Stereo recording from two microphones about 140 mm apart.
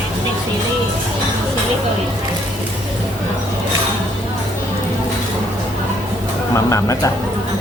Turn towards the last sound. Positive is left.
turn(degrees=20)  # may be behind; listen again after turning